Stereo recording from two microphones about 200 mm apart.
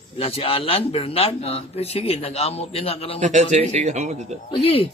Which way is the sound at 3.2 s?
35° right (ahead or behind).